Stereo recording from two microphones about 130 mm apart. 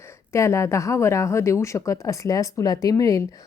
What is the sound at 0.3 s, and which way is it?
A woman's voice, 20° left (ahead or behind).